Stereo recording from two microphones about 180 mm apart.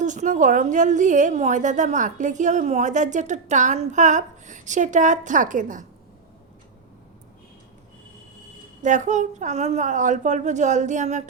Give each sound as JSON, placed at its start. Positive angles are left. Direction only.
{"t": 0.0, "sound": "a woman's voice", "side_deg": -45}
{"t": 8.8, "sound": "a woman's voice", "side_deg": -45}